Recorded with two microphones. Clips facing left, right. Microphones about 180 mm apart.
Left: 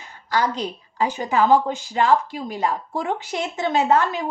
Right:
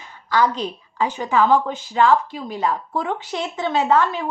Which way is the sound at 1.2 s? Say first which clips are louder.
Even; 45° left (ahead or behind).